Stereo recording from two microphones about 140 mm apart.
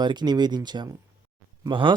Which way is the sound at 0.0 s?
30° right (ahead or behind).